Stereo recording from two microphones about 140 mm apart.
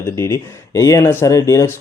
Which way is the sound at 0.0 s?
20° left (ahead or behind).